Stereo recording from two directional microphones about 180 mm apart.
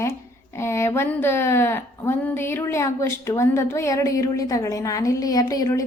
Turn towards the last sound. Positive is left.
turn(degrees=20)  # may be behind; listen again after turning